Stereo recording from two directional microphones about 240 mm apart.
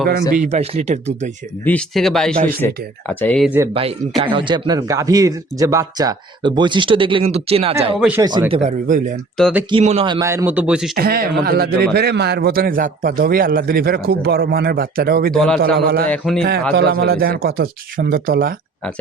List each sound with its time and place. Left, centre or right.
0.1 s speech: right
1.6 s speech: centre
4.2 s speech: centre
7.9 s speech: centre
8.2 s speech: centre; by 9.1 s right
9.4 s speech: centre
9.6 s a man's voice: right; by 10.9 s centre
10.9 s a man's voice: right
15.3 s speech: centre
15.6 s a man's voice: right
16.0 s speech: centre
16.7 s a man's voice: right